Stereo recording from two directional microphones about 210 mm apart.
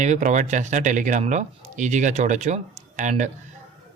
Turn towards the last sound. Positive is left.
turn(degrees=-35)  # may be behind; listen again after turning